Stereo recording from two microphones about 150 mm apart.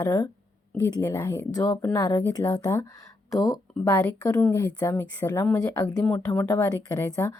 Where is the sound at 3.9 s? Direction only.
20° left (ahead or behind).